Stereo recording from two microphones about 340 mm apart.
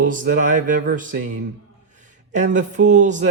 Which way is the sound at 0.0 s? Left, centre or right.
Right.